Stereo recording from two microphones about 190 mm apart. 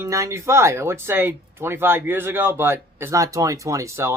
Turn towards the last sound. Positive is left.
turn(degrees=-15)  # may be behind; listen again after turning